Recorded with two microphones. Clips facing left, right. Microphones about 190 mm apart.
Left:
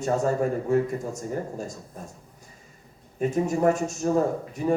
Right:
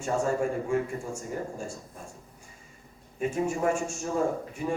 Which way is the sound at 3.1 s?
40° left (ahead or behind).